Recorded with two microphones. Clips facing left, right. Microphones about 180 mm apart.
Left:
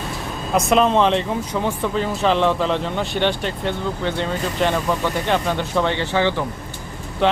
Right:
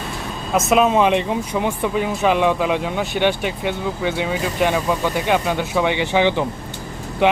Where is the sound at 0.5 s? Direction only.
5° right (ahead or behind).